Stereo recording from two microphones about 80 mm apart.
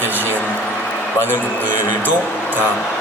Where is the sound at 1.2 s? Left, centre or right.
Left.